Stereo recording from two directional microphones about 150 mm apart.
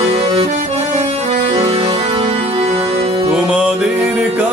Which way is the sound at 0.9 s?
45° right (ahead or behind).